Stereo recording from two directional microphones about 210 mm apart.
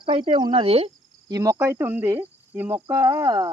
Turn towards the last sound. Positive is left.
turn(degrees=-20)  # may be behind; listen again after turning